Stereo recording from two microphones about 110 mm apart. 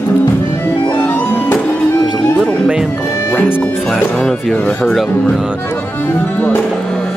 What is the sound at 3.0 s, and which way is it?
Music, 25° left (ahead or behind).